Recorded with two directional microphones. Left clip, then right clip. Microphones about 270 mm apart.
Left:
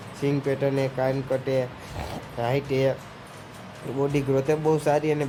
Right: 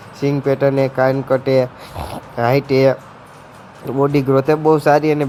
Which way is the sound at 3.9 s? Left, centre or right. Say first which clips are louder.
Right 9 dB; centre.